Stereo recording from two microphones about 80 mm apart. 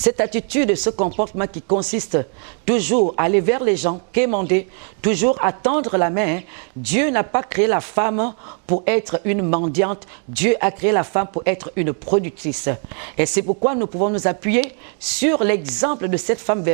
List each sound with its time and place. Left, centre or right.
0.0 s speech: centre